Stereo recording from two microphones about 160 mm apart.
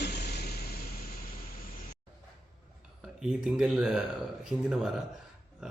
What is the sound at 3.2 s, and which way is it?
Speech, 5° right (ahead or behind).